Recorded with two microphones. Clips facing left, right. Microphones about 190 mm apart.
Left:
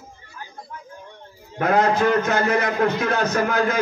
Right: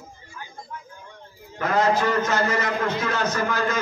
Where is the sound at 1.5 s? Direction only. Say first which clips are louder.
Left 3 dB; 60° left (ahead or behind).